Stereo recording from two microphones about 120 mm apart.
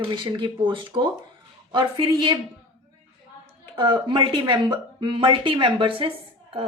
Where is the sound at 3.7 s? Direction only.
40° right (ahead or behind).